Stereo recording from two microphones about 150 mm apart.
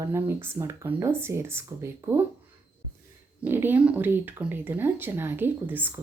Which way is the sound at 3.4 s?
15° right (ahead or behind).